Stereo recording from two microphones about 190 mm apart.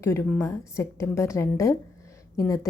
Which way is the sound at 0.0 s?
15° left (ahead or behind).